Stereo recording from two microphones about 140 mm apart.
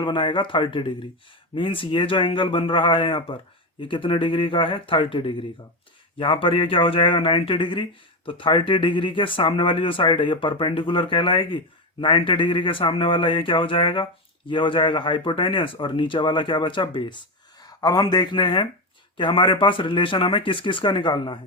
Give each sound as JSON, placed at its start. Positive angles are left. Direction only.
{"t": 0.0, "sound": "speech", "side_deg": 35}